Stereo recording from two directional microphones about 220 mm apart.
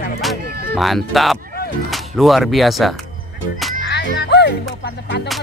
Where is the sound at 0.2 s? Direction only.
Centre (ahead or behind).